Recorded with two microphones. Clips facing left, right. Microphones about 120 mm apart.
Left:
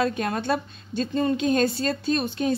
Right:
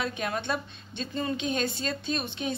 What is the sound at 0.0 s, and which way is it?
A woman's voice, 45° left (ahead or behind).